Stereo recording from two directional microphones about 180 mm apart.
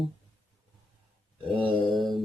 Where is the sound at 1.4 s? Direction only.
30° right (ahead or behind).